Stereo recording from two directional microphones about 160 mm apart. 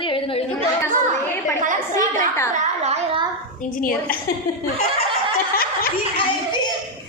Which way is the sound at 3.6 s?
60° left (ahead or behind).